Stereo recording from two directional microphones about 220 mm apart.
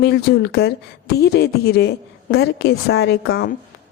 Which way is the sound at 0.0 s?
45° left (ahead or behind).